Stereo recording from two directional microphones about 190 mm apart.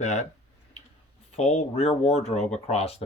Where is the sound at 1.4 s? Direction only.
35° left (ahead or behind).